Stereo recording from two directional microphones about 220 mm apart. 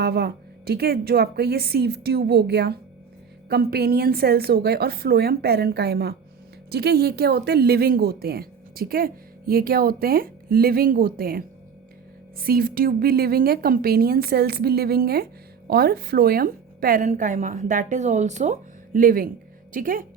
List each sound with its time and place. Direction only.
0.0 s a woman's voice: 45° right (ahead or behind)